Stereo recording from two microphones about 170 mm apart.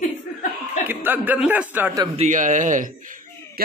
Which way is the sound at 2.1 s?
45° right (ahead or behind).